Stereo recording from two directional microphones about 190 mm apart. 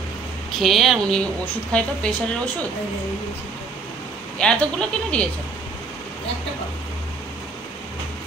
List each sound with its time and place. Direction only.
0.5 s speech: centre (ahead or behind)
4.4 s speech: 5° left (ahead or behind)